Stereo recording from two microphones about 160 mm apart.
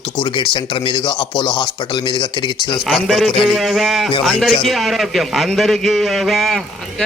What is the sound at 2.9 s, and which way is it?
A man's voice, centre (ahead or behind).